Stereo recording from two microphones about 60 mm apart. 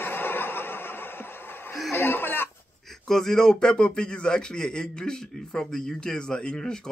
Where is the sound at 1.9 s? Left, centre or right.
Left.